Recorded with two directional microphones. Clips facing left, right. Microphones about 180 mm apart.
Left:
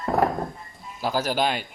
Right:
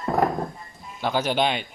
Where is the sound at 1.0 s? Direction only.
5° left (ahead or behind).